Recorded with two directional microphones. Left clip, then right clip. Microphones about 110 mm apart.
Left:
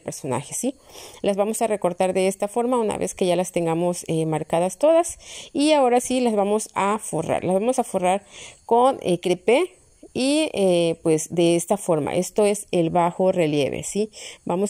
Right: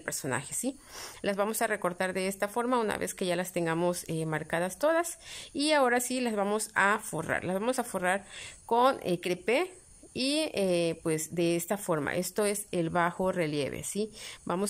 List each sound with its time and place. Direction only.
0.0 s a woman's voice: 25° left (ahead or behind)